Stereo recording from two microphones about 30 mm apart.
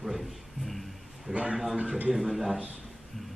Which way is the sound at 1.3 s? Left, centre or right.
Right.